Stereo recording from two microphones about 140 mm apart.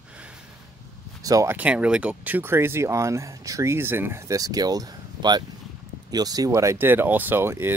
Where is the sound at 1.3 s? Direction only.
25° right (ahead or behind).